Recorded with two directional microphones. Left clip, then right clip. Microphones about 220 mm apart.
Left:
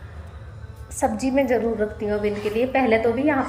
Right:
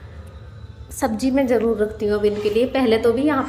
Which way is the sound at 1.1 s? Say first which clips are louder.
Right 3 dB; 15° right (ahead or behind).